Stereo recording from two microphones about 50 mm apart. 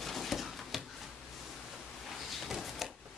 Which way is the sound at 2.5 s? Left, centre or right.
Centre.